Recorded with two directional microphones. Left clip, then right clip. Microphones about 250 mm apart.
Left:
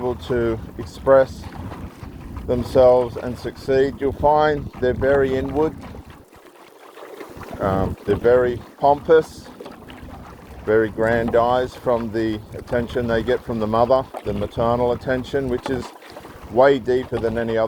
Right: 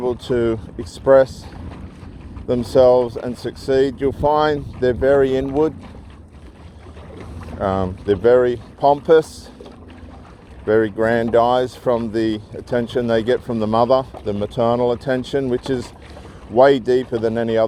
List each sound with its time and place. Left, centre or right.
0.0 s speech: right
2.5 s speech: right
7.6 s speech: right
10.7 s speech: right